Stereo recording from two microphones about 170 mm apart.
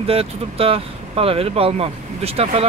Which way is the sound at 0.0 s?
35° right (ahead or behind).